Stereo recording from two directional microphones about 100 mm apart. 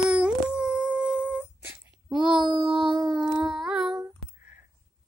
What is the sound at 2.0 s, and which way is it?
Child singing, 50° right (ahead or behind).